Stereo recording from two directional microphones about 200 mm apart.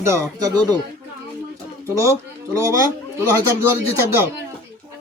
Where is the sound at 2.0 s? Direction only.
15° right (ahead or behind).